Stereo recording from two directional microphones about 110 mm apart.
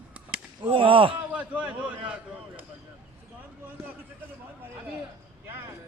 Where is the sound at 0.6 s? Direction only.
50° right (ahead or behind).